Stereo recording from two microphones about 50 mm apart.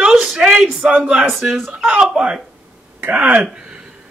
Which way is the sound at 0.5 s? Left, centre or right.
Right.